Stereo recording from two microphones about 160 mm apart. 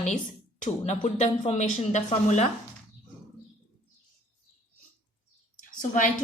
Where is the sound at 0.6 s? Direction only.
45° left (ahead or behind).